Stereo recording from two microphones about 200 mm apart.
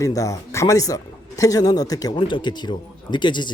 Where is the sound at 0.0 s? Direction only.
15° left (ahead or behind).